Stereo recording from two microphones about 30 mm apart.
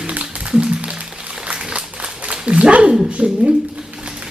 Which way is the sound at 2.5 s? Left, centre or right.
Right.